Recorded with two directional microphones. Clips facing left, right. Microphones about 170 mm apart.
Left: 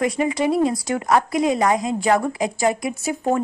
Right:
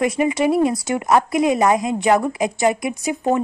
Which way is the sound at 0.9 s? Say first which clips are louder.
Right 2 dB; 20° right (ahead or behind).